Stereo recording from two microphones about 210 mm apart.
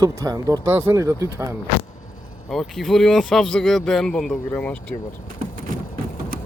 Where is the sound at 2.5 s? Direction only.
Centre (ahead or behind).